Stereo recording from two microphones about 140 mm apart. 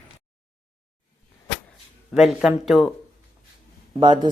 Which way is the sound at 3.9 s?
35° right (ahead or behind).